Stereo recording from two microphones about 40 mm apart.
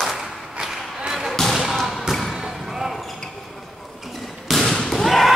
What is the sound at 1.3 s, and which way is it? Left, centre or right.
Basketball bounce, centre.